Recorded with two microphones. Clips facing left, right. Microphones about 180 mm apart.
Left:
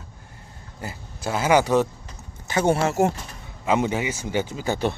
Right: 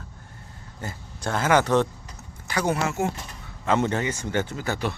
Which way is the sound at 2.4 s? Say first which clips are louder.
Left 4 dB; 25° left (ahead or behind).